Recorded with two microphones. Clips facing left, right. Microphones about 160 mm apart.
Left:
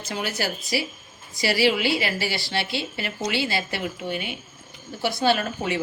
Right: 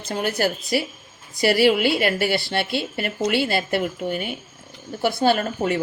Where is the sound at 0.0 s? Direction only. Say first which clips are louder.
Right 5 dB; 50° right (ahead or behind).